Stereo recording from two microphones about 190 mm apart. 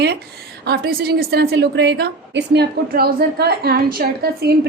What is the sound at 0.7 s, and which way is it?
A woman's voice, 55° right (ahead or behind).